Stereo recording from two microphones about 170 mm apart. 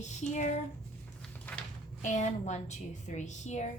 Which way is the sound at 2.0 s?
45° left (ahead or behind).